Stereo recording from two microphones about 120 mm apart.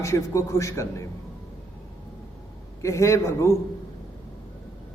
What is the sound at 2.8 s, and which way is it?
Speech, 25° left (ahead or behind).